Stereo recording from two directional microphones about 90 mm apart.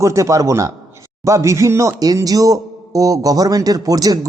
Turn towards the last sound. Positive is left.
turn(degrees=-40)  # may be behind; listen again after turning